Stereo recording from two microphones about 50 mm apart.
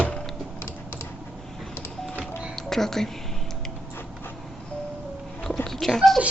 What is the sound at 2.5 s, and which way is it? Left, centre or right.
Music, centre.